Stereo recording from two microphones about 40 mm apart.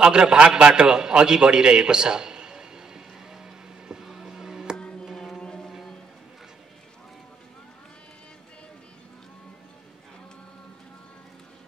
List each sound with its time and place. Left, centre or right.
0.0 s a sound: right
5.0 s music: centre
5.4 s music: centre